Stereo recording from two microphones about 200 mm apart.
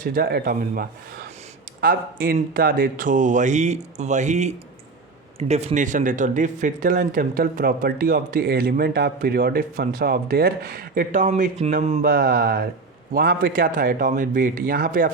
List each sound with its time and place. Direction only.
0.0 s speech: 50° right (ahead or behind)